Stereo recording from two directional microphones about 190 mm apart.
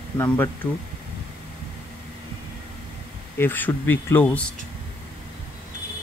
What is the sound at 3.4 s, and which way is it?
Speech, 10° left (ahead or behind).